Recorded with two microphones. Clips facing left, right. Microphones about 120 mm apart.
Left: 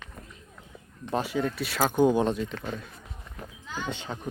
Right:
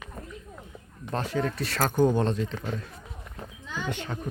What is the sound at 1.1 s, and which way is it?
Speech, 5° left (ahead or behind).